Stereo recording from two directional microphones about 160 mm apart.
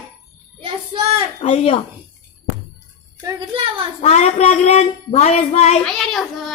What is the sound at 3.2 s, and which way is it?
Speech, 30° right (ahead or behind).